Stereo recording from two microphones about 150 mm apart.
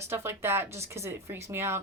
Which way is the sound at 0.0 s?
15° right (ahead or behind).